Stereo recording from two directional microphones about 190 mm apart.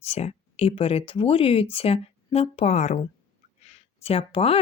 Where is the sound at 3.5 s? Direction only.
35° left (ahead or behind).